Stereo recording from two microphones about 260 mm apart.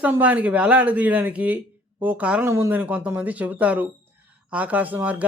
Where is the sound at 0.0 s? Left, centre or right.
Centre.